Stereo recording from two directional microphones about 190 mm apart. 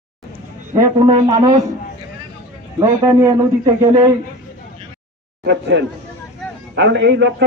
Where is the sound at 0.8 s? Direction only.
20° right (ahead or behind).